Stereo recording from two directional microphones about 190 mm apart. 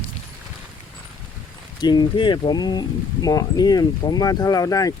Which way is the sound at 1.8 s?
20° left (ahead or behind).